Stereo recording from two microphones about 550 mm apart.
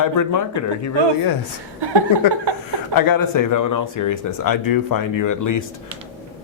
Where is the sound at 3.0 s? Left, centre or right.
Left.